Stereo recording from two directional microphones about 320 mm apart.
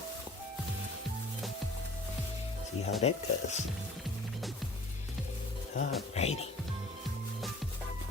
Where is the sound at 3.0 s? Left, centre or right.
Left.